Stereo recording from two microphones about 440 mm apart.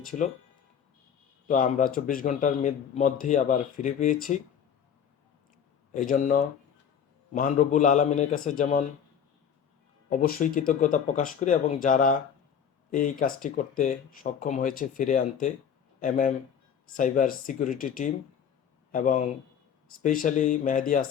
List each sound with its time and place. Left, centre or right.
1.5 s speech: centre
5.9 s speech: centre
10.1 s a man's voice: centre